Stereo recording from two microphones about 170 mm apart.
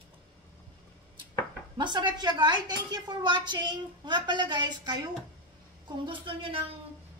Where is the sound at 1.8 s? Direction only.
25° right (ahead or behind).